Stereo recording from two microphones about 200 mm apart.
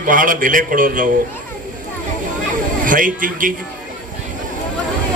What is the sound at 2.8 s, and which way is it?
Speech, 40° right (ahead or behind).